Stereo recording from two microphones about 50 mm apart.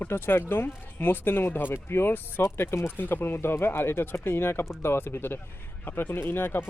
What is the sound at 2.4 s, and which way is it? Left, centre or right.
Speech, left.